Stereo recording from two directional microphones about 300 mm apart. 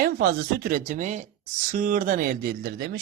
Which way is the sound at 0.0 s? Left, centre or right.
Right.